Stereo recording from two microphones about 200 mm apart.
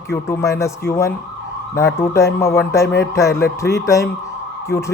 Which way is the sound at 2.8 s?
60° left (ahead or behind).